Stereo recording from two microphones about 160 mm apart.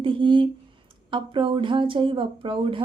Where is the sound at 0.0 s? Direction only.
30° right (ahead or behind).